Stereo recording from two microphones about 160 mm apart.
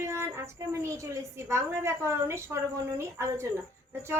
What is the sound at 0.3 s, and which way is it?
A woman's voice, 15° right (ahead or behind).